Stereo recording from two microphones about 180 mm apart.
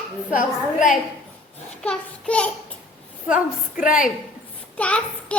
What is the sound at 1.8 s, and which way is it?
Speech, 5° left (ahead or behind).